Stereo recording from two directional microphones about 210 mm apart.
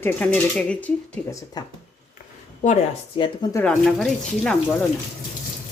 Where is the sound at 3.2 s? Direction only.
20° left (ahead or behind).